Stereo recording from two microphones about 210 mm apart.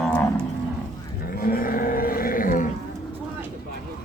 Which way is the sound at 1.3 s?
45° left (ahead or behind).